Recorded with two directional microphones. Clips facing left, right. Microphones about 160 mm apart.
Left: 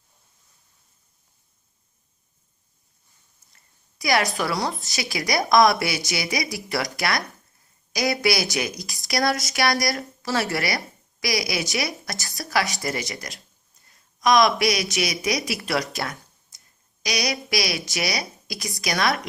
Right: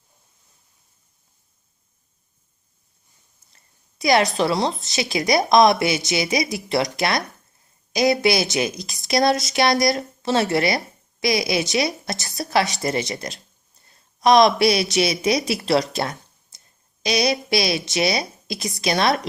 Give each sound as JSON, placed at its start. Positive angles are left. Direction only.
{"t": 3.5, "sound": "a woman's voice", "side_deg": -25}